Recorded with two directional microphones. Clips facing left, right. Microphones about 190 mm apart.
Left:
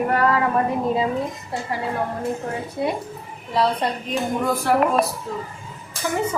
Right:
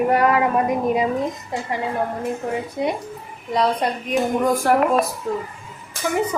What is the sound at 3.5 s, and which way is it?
Speech, 15° right (ahead or behind).